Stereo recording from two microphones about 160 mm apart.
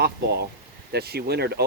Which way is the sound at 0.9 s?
80° right.